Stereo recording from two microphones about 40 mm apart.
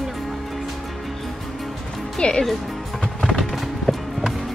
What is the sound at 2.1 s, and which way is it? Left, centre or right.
Speech, left.